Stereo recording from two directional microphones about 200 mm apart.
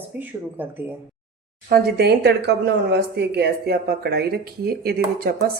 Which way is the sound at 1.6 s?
50° right (ahead or behind).